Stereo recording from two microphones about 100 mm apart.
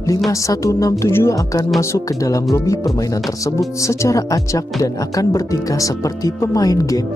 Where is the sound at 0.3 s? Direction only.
30° left (ahead or behind).